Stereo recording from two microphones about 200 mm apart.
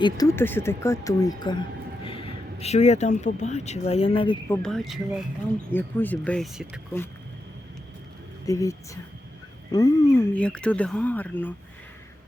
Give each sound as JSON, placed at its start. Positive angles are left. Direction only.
{"t": 0.0, "sound": "speech", "side_deg": 15}
{"t": 4.4, "sound": "speech", "side_deg": 5}
{"t": 8.4, "sound": "speech", "side_deg": 15}
{"t": 9.7, "sound": "speech", "side_deg": 20}